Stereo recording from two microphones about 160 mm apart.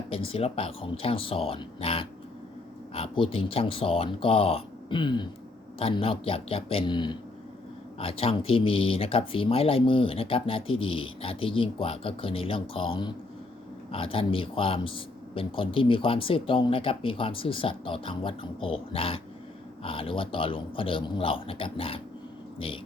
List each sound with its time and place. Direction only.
0.1 s a man's voice: 35° left (ahead or behind)